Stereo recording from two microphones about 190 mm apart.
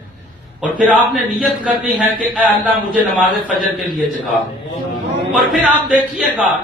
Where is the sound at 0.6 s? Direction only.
5° right (ahead or behind).